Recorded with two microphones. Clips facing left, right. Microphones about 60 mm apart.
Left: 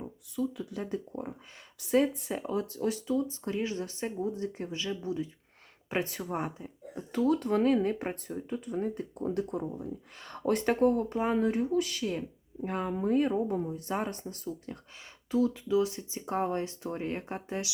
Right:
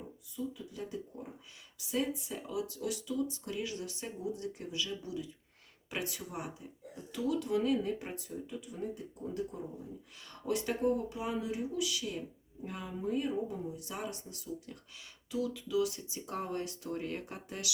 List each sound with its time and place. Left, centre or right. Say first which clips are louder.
0.3 s speech: left 7 dB; left
2.4 s speech: left 7 dB; left
10.2 s speech: left 6 dB; left